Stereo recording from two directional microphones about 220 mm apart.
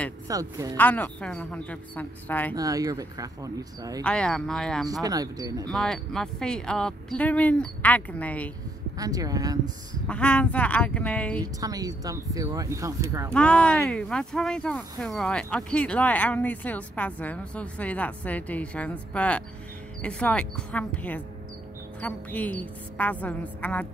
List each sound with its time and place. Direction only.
0.3 s speech: 15° right (ahead or behind)
0.7 s a woman's voice: 10° left (ahead or behind)
2.5 s speech: 15° right (ahead or behind)
4.0 s speech: 5° left (ahead or behind)
5.0 s speech: 15° right (ahead or behind)
5.7 s speech: centre (ahead or behind)
8.9 s speech: 15° right (ahead or behind)
10.0 s a woman's voice: 5° left (ahead or behind)
11.4 s speech: 15° right (ahead or behind)
13.3 s a woman's voice: 5° left (ahead or behind)